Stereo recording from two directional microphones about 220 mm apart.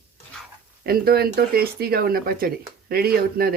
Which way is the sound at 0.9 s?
45° right (ahead or behind).